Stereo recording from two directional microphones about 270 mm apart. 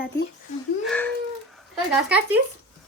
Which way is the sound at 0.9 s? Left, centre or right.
Centre.